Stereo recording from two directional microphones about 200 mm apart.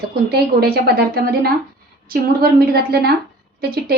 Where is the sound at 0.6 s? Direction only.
50° right (ahead or behind).